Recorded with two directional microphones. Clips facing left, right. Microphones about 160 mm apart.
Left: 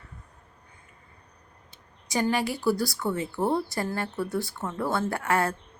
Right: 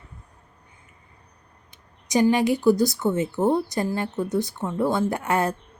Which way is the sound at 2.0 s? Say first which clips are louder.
Right 7 dB; 20° right (ahead or behind).